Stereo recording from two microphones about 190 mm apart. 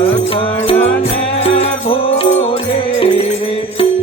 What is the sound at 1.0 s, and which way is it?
Music, 30° left (ahead or behind).